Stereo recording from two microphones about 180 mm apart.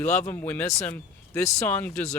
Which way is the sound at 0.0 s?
10° left (ahead or behind).